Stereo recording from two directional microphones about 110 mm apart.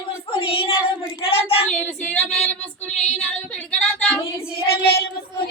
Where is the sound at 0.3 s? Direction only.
55° left (ahead or behind).